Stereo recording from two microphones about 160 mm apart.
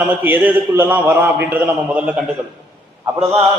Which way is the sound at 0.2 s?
10° right (ahead or behind).